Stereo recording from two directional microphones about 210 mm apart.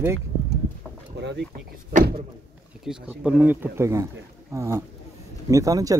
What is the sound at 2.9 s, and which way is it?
Speech, 5° right (ahead or behind).